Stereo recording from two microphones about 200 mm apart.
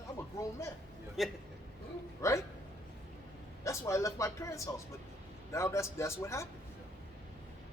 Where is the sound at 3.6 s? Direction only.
15° left (ahead or behind).